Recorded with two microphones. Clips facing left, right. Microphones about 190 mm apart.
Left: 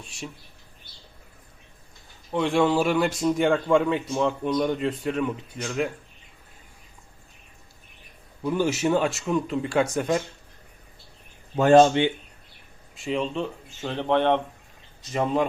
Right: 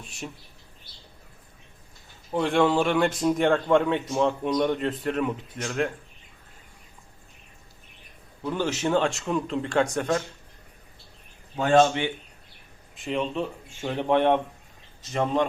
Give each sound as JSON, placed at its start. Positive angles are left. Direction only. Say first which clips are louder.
{"t": 0.0, "sound": "a man's voice", "louder": "even", "side_deg": 0}
{"t": 2.3, "sound": "a man's voice", "louder": "even", "side_deg": 0}
{"t": 8.4, "sound": "speech", "louder": "left 3 dB", "side_deg": 10}
{"t": 11.5, "sound": "a man's voice", "louder": "left 4 dB", "side_deg": 40}
{"t": 13.0, "sound": "a man's voice", "louder": "left 1 dB", "side_deg": 0}
{"t": 13.8, "sound": "speech", "louder": "even", "side_deg": -15}
{"t": 15.1, "sound": "a man's voice", "louder": "left 1 dB", "side_deg": 5}